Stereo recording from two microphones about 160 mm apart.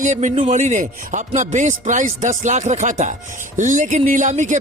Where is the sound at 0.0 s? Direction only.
50° right (ahead or behind).